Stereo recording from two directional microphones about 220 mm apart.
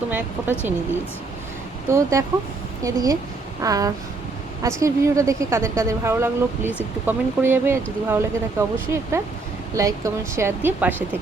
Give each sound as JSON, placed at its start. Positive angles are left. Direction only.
{"t": 0.1, "sound": "a woman's voice", "side_deg": -10}
{"t": 1.9, "sound": "a woman's voice", "side_deg": -15}